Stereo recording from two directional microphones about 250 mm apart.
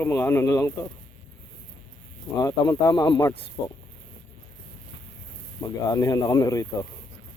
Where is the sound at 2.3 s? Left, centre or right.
Centre.